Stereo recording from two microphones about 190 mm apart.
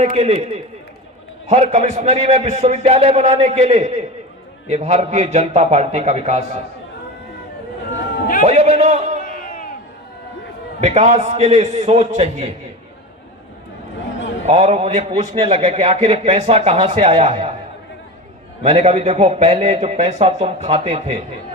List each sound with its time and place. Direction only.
0.0 s a man's voice: 35° right (ahead or behind)
8.4 s a man's voice: 35° right (ahead or behind)
9.2 s crowd: 50° left (ahead or behind)
10.8 s a man's voice: 35° right (ahead or behind)
14.4 s a man's voice: 35° right (ahead or behind)
18.6 s a man's voice: 35° right (ahead or behind)